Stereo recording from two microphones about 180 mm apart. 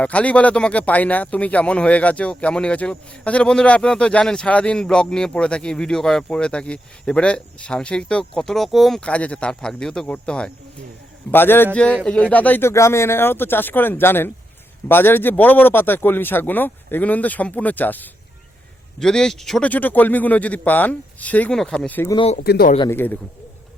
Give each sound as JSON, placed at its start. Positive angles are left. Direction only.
{"t": 0.0, "sound": "a man's voice", "side_deg": 5}
{"t": 22.1, "sound": "speech", "side_deg": 30}
{"t": 22.4, "sound": "speech", "side_deg": 55}
{"t": 22.9, "sound": "a man's voice", "side_deg": 10}